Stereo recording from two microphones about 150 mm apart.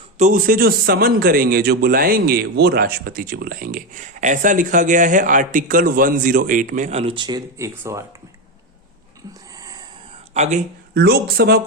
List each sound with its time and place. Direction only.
0.2 s a man's voice: 60° right (ahead or behind); by 8.0 s 20° right (ahead or behind)
9.6 s a sound: 25° right (ahead or behind)
10.3 s speech: 50° right (ahead or behind)
10.9 s speech: 90° right